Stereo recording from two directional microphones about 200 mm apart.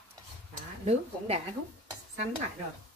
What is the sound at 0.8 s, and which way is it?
Speech, 30° right (ahead or behind).